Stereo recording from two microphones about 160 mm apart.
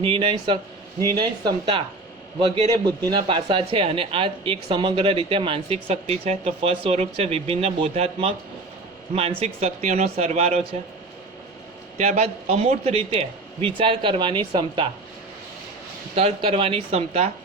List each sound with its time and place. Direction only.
0.0 s speech: 35° right (ahead or behind)
2.8 s speech: 25° right (ahead or behind)
9.4 s speech: 40° right (ahead or behind)
11.9 s speech: 45° right (ahead or behind); by 14.8 s 30° right (ahead or behind)
16.1 s speech: 35° right (ahead or behind)